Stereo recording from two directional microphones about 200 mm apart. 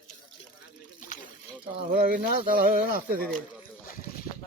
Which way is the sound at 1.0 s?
40° left (ahead or behind).